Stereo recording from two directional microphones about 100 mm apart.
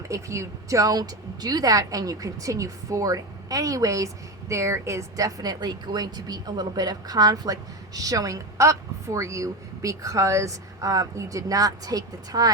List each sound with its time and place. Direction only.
0.1 s speech: 30° right (ahead or behind)